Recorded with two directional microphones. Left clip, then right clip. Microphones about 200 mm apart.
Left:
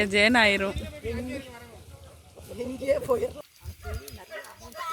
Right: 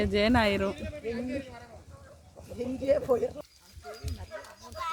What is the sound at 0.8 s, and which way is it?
Speech, 50° left (ahead or behind).